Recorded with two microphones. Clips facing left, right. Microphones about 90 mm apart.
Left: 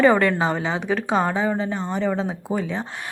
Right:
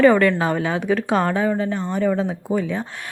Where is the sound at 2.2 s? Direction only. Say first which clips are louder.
Right 3 dB; 5° left (ahead or behind).